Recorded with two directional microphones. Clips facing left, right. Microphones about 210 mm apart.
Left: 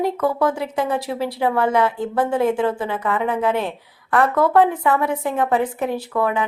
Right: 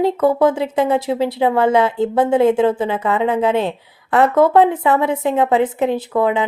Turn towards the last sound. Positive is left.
turn(degrees=-25)  # may be behind; listen again after turning